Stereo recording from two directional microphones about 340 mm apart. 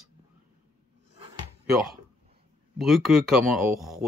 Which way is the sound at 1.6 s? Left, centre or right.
Centre.